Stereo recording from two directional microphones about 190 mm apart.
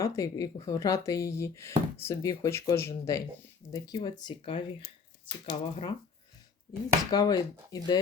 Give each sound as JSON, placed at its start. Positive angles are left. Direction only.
{"t": 0.0, "sound": "speech", "side_deg": 15}
{"t": 7.1, "sound": "speech", "side_deg": 20}